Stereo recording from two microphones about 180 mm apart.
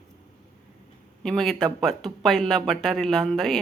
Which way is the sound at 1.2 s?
Centre (ahead or behind).